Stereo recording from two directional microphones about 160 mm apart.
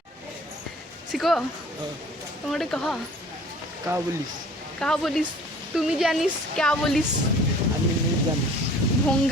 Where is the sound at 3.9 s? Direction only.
20° right (ahead or behind).